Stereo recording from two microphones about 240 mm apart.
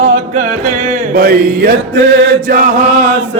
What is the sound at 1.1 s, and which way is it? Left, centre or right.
Mantra, right.